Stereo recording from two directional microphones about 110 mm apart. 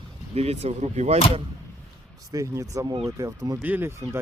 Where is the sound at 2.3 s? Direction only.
30° right (ahead or behind).